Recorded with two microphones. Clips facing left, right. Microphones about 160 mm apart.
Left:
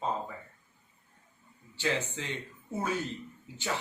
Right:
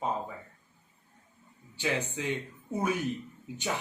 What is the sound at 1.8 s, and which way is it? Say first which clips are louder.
Speech: right 1 dB; 15° right (ahead or behind).